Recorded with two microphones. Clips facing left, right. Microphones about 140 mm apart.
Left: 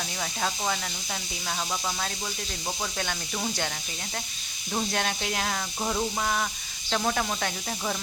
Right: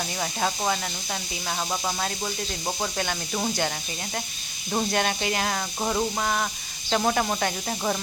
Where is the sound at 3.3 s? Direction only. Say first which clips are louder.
Right 5 dB; 25° right (ahead or behind).